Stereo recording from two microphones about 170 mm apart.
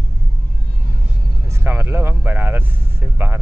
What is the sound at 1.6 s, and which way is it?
Speech, 15° right (ahead or behind).